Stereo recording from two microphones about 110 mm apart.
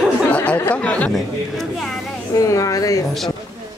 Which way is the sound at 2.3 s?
30° left (ahead or behind).